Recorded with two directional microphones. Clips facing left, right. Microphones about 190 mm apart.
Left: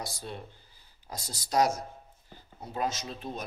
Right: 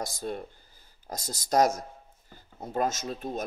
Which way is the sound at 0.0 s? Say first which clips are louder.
Right 6 dB; 45° right (ahead or behind).